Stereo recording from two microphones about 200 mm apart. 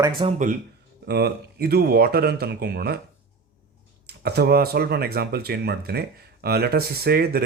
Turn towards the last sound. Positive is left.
turn(degrees=-50)  # may be behind; listen again after turning